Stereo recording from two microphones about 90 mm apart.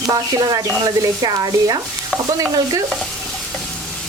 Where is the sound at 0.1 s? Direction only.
45° right (ahead or behind).